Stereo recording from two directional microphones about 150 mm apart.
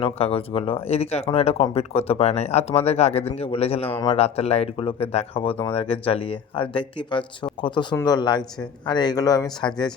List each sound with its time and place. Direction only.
0.0 s speech: 40° left (ahead or behind)